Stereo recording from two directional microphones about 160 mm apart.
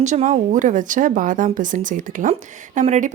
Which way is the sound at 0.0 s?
50° right (ahead or behind).